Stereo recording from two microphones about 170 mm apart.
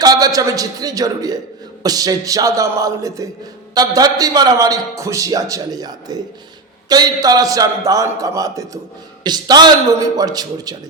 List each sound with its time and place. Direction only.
0.0 s a man's voice: 20° right (ahead or behind)